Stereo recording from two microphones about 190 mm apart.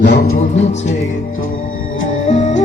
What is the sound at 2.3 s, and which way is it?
Music, 40° left (ahead or behind).